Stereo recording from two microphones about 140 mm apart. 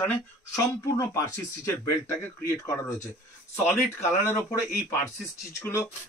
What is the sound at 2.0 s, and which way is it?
Speech, 25° left (ahead or behind).